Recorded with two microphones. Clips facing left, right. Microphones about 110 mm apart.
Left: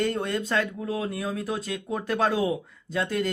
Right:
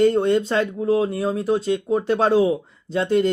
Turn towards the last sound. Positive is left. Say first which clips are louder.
# right 8 dB
turn(degrees=-30)  # may be behind; listen again after turning